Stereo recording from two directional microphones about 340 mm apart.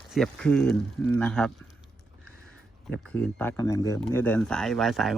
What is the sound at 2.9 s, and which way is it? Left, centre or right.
Speech, centre.